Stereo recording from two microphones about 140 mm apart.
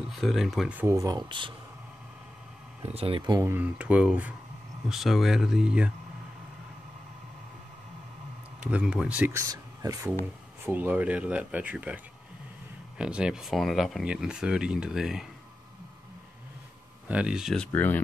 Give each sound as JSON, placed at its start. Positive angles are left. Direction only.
{"t": 0.1, "sound": "speech", "side_deg": 0}
{"t": 0.7, "sound": "speech", "side_deg": -20}
{"t": 2.8, "sound": "speech", "side_deg": -45}
{"t": 3.3, "sound": "speech", "side_deg": -15}
{"t": 8.6, "sound": "speech", "side_deg": -10}
{"t": 9.4, "sound": "a sound", "side_deg": -25}
{"t": 10.6, "sound": "speech", "side_deg": -15}
{"t": 17.1, "sound": "speech", "side_deg": -5}
{"t": 17.6, "sound": "speech", "side_deg": 10}